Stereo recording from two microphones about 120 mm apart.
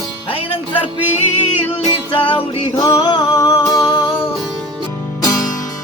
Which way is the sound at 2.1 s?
45° left (ahead or behind).